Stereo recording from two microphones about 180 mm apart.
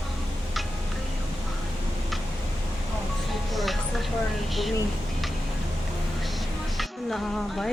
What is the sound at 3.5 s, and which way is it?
Music, centre (ahead or behind).